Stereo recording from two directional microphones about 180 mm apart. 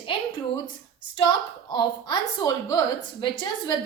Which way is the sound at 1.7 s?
25° left (ahead or behind).